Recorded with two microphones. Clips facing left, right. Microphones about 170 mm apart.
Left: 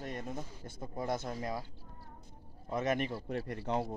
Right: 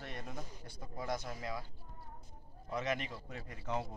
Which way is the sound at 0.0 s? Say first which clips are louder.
Left 6 dB; 40° left (ahead or behind).